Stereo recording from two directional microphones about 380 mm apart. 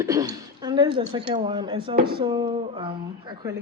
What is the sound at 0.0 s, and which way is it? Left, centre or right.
Speech, centre.